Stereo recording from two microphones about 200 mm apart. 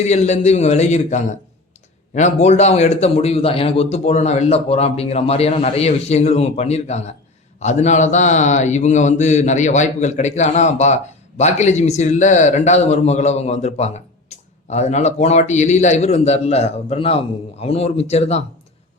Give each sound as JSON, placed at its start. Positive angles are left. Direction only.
{"t": 0.0, "sound": "a man's voice", "side_deg": 35}